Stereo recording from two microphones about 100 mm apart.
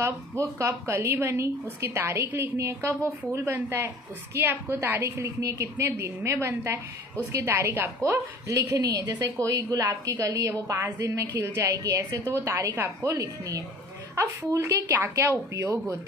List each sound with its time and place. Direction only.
0.0 s a woman's voice: 30° right (ahead or behind)
13.1 s a woman's voice: 35° right (ahead or behind)